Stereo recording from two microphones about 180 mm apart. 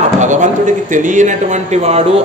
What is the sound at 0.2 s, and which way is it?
Speech, 45° right (ahead or behind).